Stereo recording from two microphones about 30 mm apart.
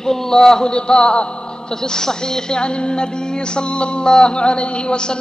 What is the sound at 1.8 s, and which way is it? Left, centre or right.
Music, left.